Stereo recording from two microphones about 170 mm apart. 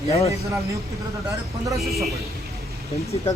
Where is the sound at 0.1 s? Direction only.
35° left (ahead or behind).